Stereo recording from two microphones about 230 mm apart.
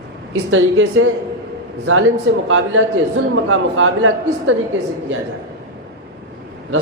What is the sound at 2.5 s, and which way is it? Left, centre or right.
A man's voice, right.